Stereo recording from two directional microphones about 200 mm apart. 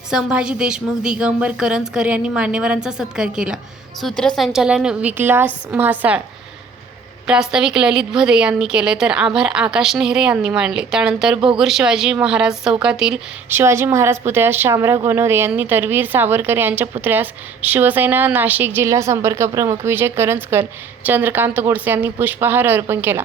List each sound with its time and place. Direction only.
0.1 s a woman's voice: 5° right (ahead or behind)
7.3 s a woman's voice: 5° right (ahead or behind)